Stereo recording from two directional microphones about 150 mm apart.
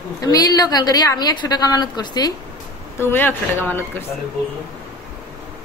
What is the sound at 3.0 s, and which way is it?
Speech, 15° left (ahead or behind).